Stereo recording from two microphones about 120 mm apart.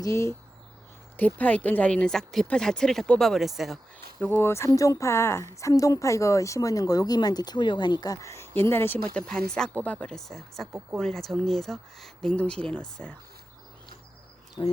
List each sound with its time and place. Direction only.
0.0 s a woman's voice: 25° left (ahead or behind)
1.4 s speech: 15° left (ahead or behind)
4.2 s a woman's voice: 20° left (ahead or behind)
14.6 s speech: 40° left (ahead or behind)